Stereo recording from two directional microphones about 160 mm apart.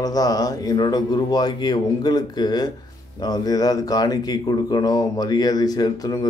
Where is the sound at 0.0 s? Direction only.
25° left (ahead or behind).